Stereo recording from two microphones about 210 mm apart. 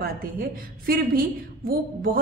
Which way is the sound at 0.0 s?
45° right (ahead or behind).